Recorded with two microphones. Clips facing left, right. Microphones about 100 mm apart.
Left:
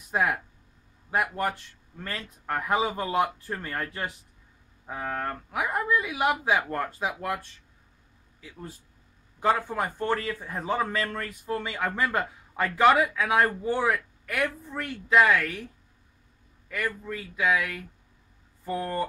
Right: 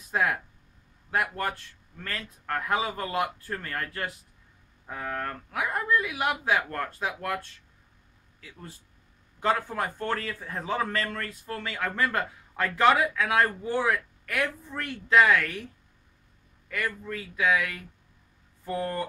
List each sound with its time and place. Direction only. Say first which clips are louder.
0.1 s a man's voice: left 1 dB; 15° left (ahead or behind)
9.4 s a man's voice: left 2 dB; 5° left (ahead or behind)